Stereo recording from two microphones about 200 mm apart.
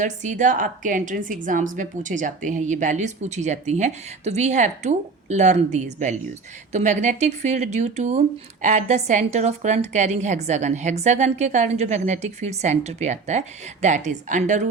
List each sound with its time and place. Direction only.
0.0 s a woman's voice: 40° right (ahead or behind)